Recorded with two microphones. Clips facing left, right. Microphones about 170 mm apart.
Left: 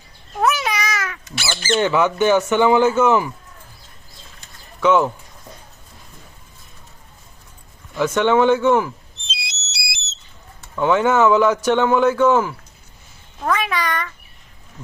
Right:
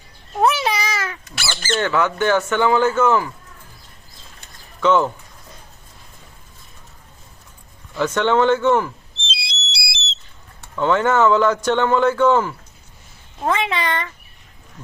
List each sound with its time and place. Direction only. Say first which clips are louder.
0.3 s a sound: right 2 dB; 30° right (ahead or behind)
1.7 s a man's voice: left 2 dB; 15° left (ahead or behind)
4.8 s a man's voice: left 1 dB; 10° left (ahead or behind)
7.9 s a man's voice: left 1 dB; 10° left (ahead or behind)
9.2 s whistle: right 3 dB; 30° right (ahead or behind)
10.8 s a man's voice: left 1 dB; 10° left (ahead or behind)
13.4 s speech: right 1 dB; 25° right (ahead or behind)